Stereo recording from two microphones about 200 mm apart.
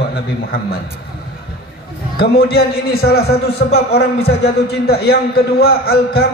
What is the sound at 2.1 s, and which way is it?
A man's voice, 50° left (ahead or behind).